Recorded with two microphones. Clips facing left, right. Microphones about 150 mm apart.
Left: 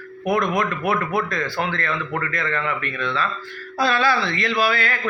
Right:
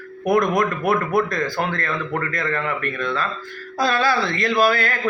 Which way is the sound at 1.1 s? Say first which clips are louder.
Right 3 dB; 45° right (ahead or behind).